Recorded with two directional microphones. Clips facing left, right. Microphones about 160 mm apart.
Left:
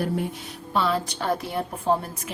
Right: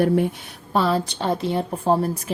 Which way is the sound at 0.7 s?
35° right (ahead or behind).